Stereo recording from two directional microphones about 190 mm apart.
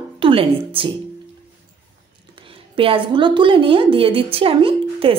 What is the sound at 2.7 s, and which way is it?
A woman's voice, 30° right (ahead or behind).